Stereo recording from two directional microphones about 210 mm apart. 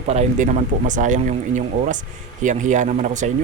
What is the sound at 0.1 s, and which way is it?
Speech, 35° right (ahead or behind).